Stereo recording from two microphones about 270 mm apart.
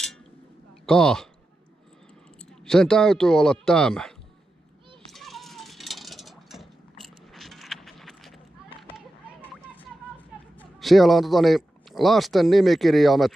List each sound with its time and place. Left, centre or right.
0.8 s speech: centre
2.6 s speech: centre
5.1 s cat: centre
8.9 s a sound: centre
10.6 s a man's voice: centre